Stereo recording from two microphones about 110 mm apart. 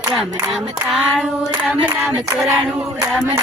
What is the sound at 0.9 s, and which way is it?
Female singing, centre (ahead or behind).